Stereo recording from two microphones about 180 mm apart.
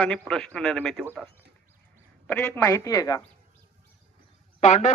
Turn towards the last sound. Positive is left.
turn(degrees=40)  # may be behind; listen again after turning